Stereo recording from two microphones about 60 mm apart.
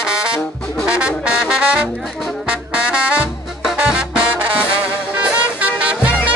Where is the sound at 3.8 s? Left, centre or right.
Centre.